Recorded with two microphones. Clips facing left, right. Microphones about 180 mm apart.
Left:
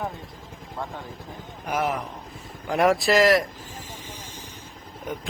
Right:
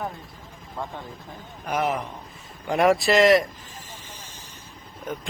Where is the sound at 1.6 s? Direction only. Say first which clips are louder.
Right 1 dB; centre (ahead or behind).